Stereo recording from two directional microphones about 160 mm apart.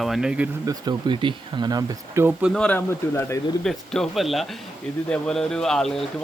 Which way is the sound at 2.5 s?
10° left (ahead or behind).